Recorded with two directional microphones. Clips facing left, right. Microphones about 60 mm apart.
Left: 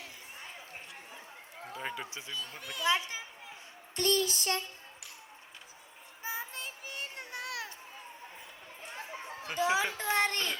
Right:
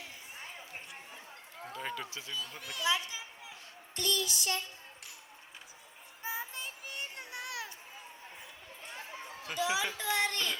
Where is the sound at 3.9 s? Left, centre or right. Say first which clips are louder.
Left 5 dB; left.